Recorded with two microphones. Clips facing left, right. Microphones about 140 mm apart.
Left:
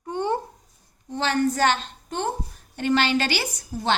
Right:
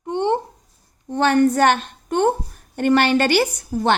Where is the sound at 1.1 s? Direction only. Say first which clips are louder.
Right 7 dB; 55° right (ahead or behind).